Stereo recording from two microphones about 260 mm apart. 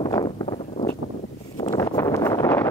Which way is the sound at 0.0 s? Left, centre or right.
Centre.